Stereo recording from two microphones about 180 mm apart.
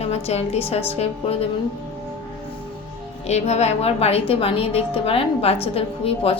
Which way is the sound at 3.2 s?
35° left (ahead or behind).